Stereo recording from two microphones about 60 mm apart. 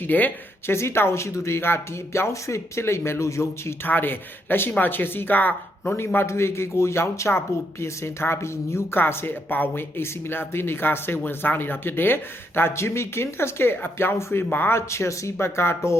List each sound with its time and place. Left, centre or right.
0.1 s speech: left
0.7 s speech: left
3.8 s speech: left
6.1 s speech: left
9.0 s speech: left
14.8 s speech: left